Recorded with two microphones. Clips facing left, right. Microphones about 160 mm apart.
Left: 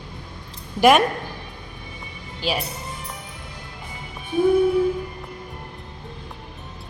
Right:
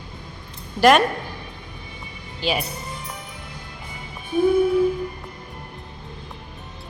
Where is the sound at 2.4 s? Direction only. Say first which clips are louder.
Right 1 dB; 45° left (ahead or behind).